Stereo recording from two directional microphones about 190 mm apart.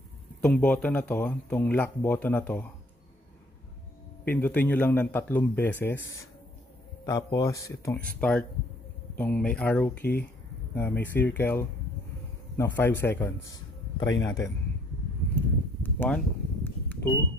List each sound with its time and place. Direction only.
0.4 s speech: 5° left (ahead or behind)
4.3 s speech: 10° left (ahead or behind)
7.1 s a man's voice: 20° left (ahead or behind)
15.8 s a sound: 10° left (ahead or behind)